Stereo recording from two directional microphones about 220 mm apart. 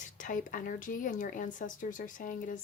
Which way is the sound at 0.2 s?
35° left (ahead or behind).